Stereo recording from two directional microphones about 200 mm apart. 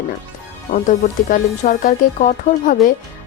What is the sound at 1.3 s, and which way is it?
A woman's voice, 40° left (ahead or behind).